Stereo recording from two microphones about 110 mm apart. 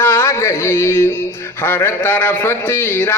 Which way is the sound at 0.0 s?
25° left (ahead or behind).